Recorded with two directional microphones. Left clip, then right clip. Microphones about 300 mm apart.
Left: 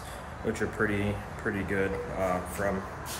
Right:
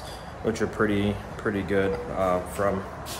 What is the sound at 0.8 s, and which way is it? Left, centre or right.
Speech, centre.